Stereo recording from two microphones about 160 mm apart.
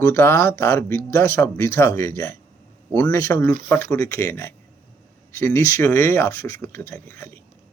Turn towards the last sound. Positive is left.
turn(degrees=15)  # may be behind; listen again after turning